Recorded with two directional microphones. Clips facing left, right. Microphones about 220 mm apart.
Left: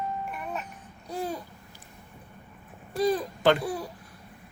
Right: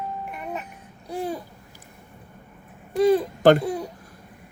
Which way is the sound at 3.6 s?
20° right (ahead or behind).